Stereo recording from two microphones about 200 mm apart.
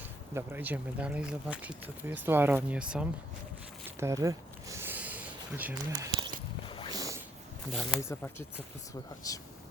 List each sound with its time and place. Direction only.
0.0 s speech: 10° right (ahead or behind)
3.8 s a sound: 15° right (ahead or behind)
6.7 s boat: 25° left (ahead or behind)
6.9 s a sound: 15° right (ahead or behind)
7.7 s speech: centre (ahead or behind)
8.0 s speech: 10° left (ahead or behind)